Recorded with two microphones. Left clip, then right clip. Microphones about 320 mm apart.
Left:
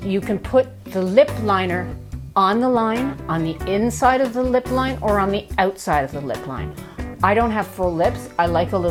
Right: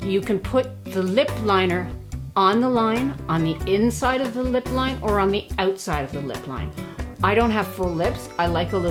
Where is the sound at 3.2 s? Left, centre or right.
Left.